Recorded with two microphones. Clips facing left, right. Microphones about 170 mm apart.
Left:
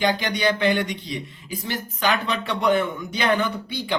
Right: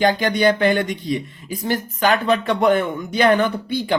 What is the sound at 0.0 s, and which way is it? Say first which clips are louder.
Speech: right 5 dB; 50° right (ahead or behind).